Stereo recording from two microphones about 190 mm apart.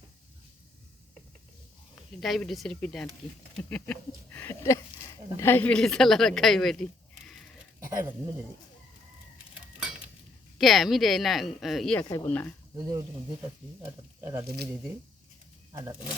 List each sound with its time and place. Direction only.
2.2 s a woman's voice: centre (ahead or behind)
3.5 s a sound: 5° left (ahead or behind)
5.4 s a woman's voice: 10° left (ahead or behind)
10.6 s a woman's voice: centre (ahead or behind)
12.0 s a sound: 15° left (ahead or behind)
13.8 s speech: 15° right (ahead or behind)
14.4 s speech: 55° right (ahead or behind)